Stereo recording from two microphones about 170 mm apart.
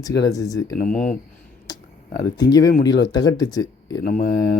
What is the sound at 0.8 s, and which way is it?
Speech, 55° left (ahead or behind).